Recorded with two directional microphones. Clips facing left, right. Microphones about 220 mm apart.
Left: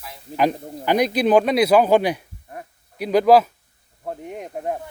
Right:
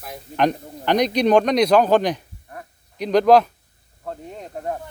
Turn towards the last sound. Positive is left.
turn(degrees=15)  # may be behind; listen again after turning